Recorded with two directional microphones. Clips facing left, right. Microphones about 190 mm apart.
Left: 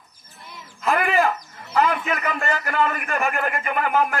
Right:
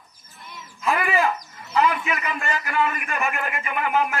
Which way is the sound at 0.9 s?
55° left (ahead or behind).